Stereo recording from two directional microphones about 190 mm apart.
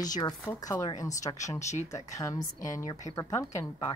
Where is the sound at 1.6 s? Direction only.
35° left (ahead or behind).